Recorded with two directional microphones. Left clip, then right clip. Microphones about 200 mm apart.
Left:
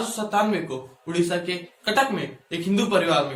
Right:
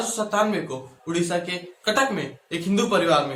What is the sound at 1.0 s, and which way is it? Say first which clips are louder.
Speech: left 1 dB; 15° right (ahead or behind).